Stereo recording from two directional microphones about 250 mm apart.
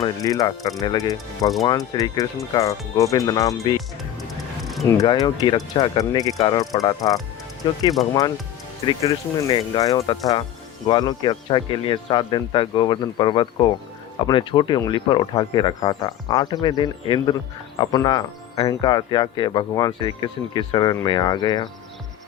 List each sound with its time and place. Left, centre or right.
0.0 s speech: centre
4.6 s a sound: centre
4.9 s speech: centre
8.9 s speech: centre